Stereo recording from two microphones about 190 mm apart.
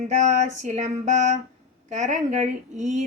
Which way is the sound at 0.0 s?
40° right (ahead or behind).